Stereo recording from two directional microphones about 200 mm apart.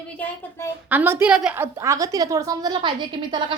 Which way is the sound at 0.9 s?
10° right (ahead or behind).